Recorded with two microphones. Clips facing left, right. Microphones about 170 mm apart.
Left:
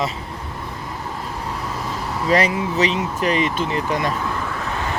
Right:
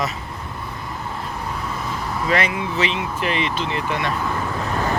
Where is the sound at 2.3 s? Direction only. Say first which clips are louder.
Left 4 dB; 35° left (ahead or behind).